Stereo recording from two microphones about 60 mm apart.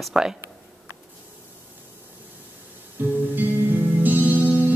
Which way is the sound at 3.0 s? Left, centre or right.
Right.